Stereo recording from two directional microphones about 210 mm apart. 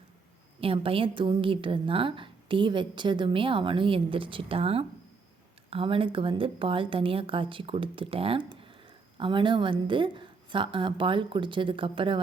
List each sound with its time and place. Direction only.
0.6 s a woman's voice: 25° right (ahead or behind)